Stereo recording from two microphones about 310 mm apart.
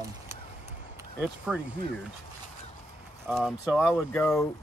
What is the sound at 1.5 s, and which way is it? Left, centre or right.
Speech, centre.